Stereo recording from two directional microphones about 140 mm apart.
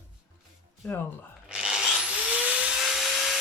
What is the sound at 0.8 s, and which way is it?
Speech, 15° left (ahead or behind).